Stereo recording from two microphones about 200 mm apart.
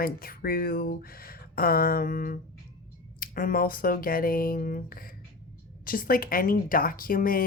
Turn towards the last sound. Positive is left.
turn(degrees=45)  # may be behind; listen again after turning